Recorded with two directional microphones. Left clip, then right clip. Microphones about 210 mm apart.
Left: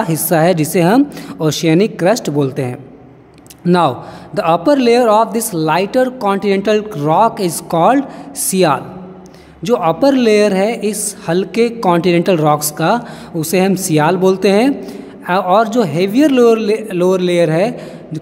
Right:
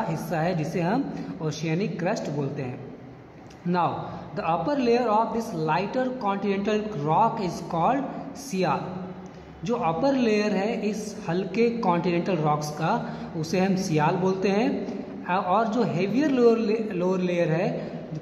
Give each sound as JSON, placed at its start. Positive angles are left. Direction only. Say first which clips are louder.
{"t": 0.0, "sound": "a woman's voice", "louder": "left 14 dB", "side_deg": 50}